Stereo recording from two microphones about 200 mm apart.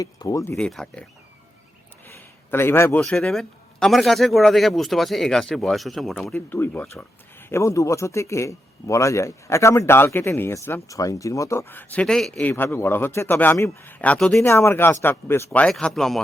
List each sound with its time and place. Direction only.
0.0 s a man's voice: 15° left (ahead or behind)
0.5 s speech: 5° left (ahead or behind)
2.0 s a sound: 10° left (ahead or behind)
3.0 s a man's voice: 5° left (ahead or behind)